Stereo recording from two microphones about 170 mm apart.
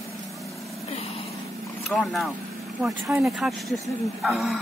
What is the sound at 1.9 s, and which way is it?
Speech, centre (ahead or behind).